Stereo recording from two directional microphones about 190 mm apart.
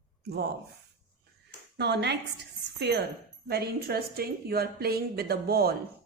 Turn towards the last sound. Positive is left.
turn(degrees=-55)  # may be behind; listen again after turning